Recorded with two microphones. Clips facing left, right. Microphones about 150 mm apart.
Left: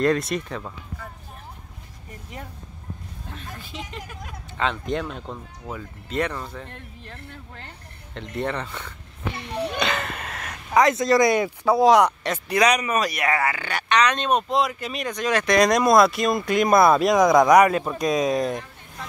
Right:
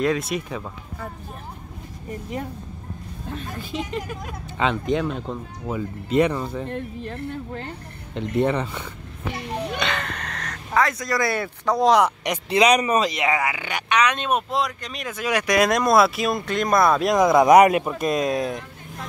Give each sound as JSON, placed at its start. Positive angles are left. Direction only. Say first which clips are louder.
{"t": 0.0, "sound": "speech", "louder": "left 1 dB", "side_deg": 0}
{"t": 3.7, "sound": "speech", "louder": "right 10 dB", "side_deg": -60}
{"t": 4.6, "sound": "speech", "louder": "right 3 dB", "side_deg": -5}
{"t": 8.1, "sound": "speech", "louder": "right 6 dB", "side_deg": -10}
{"t": 12.2, "sound": "speech", "louder": "right 2 dB", "side_deg": -20}
{"t": 16.4, "sound": "speech", "louder": "left 3 dB", "side_deg": 10}
{"t": 17.5, "sound": "speech", "louder": "right 2 dB", "side_deg": -20}
{"t": 17.9, "sound": "speech", "louder": "left 1 dB", "side_deg": 0}